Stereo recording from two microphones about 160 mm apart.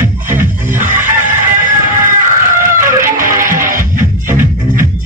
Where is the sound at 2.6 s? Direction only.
15° right (ahead or behind).